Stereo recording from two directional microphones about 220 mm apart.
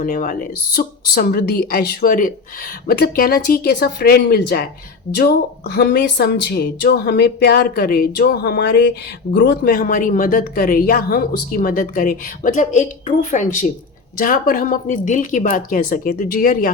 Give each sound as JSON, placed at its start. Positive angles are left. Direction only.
{"t": 0.0, "sound": "speech", "side_deg": 40}